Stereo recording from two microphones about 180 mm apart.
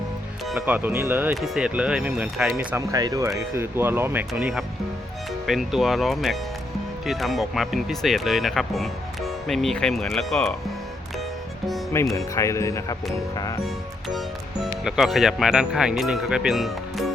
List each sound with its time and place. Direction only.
0.6 s speech: 10° right (ahead or behind)
2.9 s speech: 20° right (ahead or behind); by 10.5 s centre (ahead or behind)
12.1 s speech: 15° left (ahead or behind)
14.1 s speech: centre (ahead or behind)